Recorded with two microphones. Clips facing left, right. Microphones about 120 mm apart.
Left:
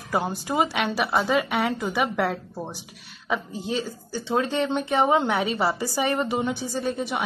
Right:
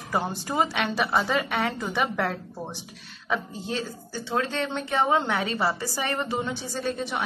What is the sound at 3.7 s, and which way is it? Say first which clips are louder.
Speech: left 3 dB; 15° left (ahead or behind).